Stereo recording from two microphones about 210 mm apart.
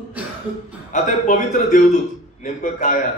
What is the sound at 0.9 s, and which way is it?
A man's voice, 35° left (ahead or behind).